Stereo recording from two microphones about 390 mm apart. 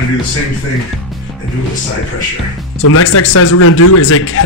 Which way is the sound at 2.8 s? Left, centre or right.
Left.